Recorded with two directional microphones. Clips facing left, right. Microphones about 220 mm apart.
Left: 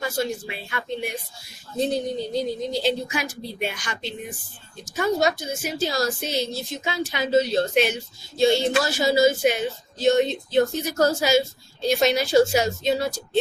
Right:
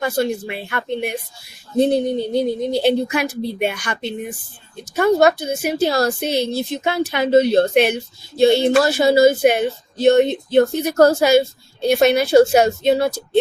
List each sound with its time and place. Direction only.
0.0 s speech: 60° right (ahead or behind)